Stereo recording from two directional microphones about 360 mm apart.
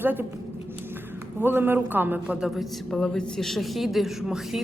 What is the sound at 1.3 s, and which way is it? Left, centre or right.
A man's voice, centre.